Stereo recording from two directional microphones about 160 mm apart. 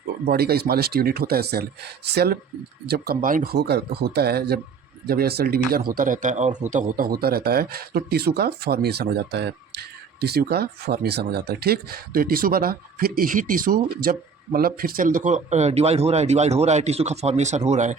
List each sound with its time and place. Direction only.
0.3 s a man's voice: 80° right; by 17.9 s 50° right (ahead or behind)